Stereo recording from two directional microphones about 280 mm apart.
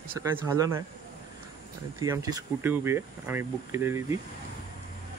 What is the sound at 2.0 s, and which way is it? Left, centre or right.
Speech, centre.